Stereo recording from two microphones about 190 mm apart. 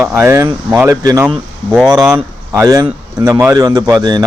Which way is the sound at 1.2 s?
Centre (ahead or behind).